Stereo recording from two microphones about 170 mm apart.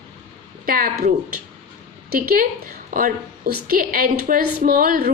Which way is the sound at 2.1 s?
60° right (ahead or behind).